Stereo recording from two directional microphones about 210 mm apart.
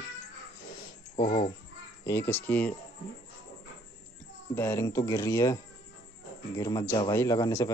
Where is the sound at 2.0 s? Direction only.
10° left (ahead or behind).